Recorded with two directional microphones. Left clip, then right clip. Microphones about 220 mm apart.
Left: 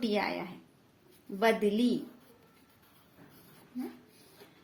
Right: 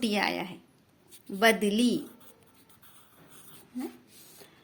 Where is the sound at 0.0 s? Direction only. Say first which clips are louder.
Right 3 dB; 45° right (ahead or behind).